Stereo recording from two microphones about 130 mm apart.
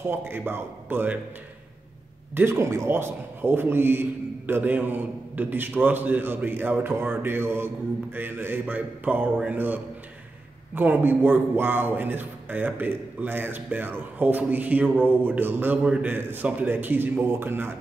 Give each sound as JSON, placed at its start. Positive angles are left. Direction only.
{"t": 0.1, "sound": "a man's voice", "side_deg": -15}
{"t": 2.3, "sound": "a man's voice", "side_deg": -20}